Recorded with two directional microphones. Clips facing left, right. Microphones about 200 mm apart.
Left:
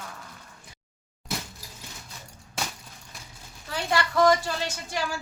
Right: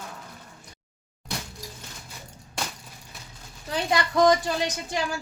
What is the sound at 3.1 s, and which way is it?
Vehicle, centre (ahead or behind).